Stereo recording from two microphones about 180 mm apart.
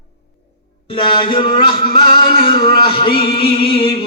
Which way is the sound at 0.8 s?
25° left (ahead or behind).